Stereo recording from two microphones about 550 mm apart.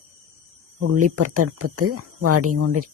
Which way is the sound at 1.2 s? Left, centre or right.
Right.